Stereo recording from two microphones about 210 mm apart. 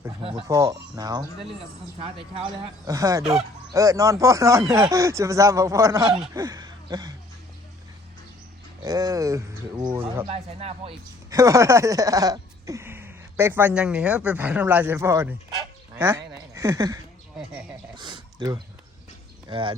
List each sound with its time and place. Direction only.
0.2 s speech: 25° right (ahead or behind)
0.5 s speech: 15° right (ahead or behind)
8.8 s speech: 15° right (ahead or behind)
10.2 s speech: 30° right (ahead or behind)
11.3 s speech: 15° right (ahead or behind)
17.3 s a sound: 5° right (ahead or behind)
17.9 s a sound: 20° right (ahead or behind)
19.5 s speech: 25° right (ahead or behind)